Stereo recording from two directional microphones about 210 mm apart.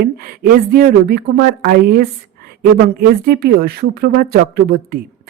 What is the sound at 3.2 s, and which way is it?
Speech, 45° right (ahead or behind).